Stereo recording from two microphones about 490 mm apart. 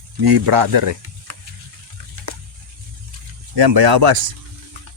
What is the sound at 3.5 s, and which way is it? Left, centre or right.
Speech, right.